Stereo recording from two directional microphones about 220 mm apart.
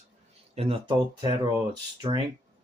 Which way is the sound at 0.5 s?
25° right (ahead or behind).